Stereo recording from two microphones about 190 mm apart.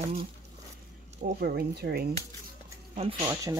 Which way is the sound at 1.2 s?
55° right (ahead or behind).